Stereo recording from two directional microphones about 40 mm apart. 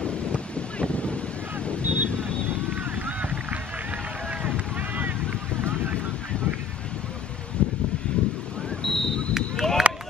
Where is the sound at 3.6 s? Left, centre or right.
Right.